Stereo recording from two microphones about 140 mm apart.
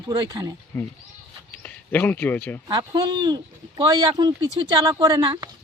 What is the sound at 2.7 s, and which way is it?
Speech, 30° right (ahead or behind).